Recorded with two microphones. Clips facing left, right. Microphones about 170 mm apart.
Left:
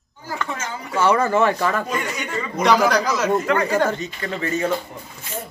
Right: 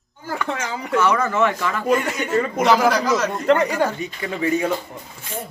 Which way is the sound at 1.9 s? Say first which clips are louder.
Right 6 dB; 60° right (ahead or behind).